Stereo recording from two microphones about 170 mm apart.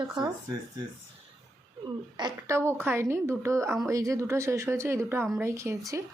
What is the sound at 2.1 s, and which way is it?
Speech, 25° right (ahead or behind).